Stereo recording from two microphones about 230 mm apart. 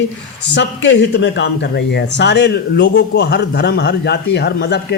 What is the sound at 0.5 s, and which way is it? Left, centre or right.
Speech, left.